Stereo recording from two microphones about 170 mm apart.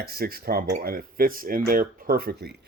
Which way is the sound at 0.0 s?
65° right (ahead or behind).